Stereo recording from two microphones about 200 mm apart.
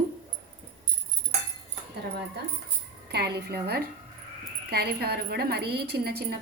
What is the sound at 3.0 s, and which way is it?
A woman's voice, 55° right (ahead or behind).